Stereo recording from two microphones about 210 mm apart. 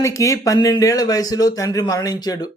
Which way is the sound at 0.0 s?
15° left (ahead or behind).